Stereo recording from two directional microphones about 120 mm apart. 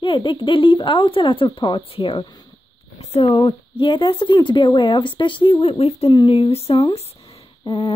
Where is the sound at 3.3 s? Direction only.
40° left (ahead or behind); by 6.1 s 55° left (ahead or behind).